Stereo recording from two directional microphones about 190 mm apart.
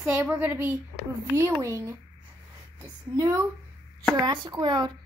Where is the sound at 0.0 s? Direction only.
10° right (ahead or behind).